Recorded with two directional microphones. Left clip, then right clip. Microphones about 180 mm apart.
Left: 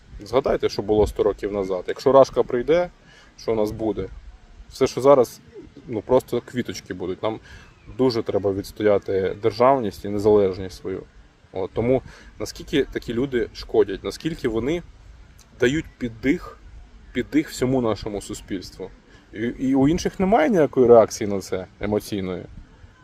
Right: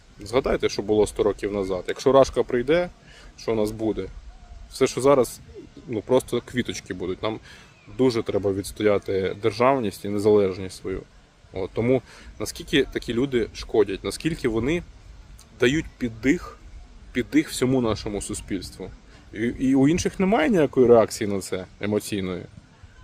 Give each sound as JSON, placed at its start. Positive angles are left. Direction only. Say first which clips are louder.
{"t": 0.3, "sound": "speech", "louder": "left 2 dB", "side_deg": -5}